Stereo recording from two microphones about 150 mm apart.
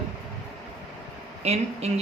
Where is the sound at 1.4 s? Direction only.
45° right (ahead or behind).